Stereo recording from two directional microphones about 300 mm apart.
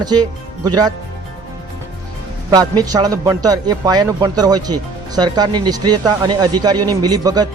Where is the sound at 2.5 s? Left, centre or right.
Centre.